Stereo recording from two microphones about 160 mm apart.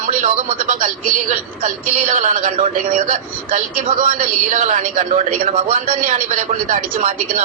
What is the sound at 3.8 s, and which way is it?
A man's voice, 45° right (ahead or behind).